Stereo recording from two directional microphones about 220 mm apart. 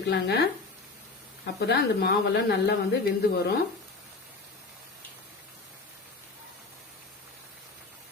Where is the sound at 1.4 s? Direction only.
45° left (ahead or behind).